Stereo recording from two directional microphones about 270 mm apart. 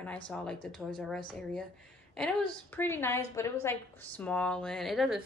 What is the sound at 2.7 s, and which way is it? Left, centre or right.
A woman's voice, centre.